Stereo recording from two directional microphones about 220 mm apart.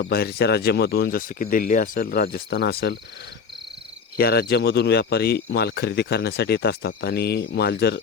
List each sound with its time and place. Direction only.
0.0 s speech: 45° left (ahead or behind)
4.2 s speech: 45° left (ahead or behind)